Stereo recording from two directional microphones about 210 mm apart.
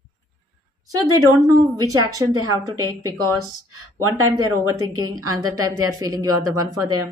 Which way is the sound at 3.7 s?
90° right.